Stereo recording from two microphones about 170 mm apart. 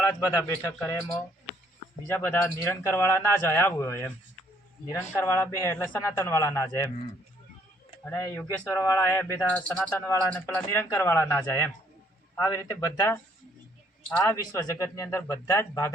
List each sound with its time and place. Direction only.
0.0 s speech: 20° left (ahead or behind)
2.0 s speech: 15° left (ahead or behind)
5.1 s speech: 15° left (ahead or behind)
8.0 s speech: 15° left (ahead or behind)
9.6 s speech: 10° left (ahead or behind)
10.1 s speech: 20° left (ahead or behind)
14.2 s speech: 20° left (ahead or behind)